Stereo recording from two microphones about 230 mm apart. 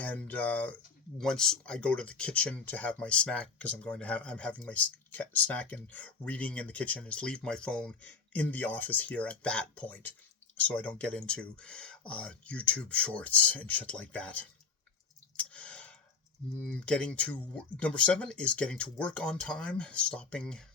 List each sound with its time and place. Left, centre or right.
0.0 s speech: centre
15.4 s a sound: centre
16.6 s speech: centre